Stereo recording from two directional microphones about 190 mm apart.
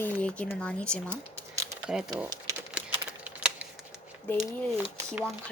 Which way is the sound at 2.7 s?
5° right (ahead or behind).